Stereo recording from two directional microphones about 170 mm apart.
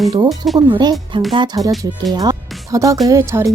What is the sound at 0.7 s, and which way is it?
Speech, 25° right (ahead or behind).